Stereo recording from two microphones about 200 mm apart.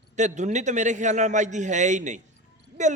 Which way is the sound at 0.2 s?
35° right (ahead or behind).